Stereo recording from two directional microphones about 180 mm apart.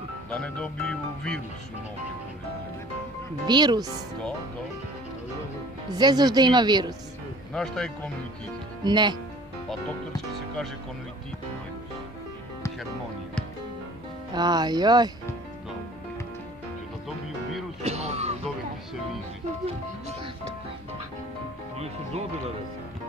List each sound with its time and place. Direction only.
0.3 s speech: 5° left (ahead or behind)
3.4 s a woman's voice: 25° right (ahead or behind)
5.9 s a woman's voice: 25° right (ahead or behind)
7.5 s speech: 5° left (ahead or behind)
8.8 s a woman's voice: 25° right (ahead or behind)
14.3 s a woman's voice: 20° right (ahead or behind)
17.8 s music: 35° right (ahead or behind)
21.7 s speech: 35° right (ahead or behind)